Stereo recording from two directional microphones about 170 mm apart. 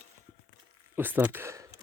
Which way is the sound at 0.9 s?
10° right (ahead or behind).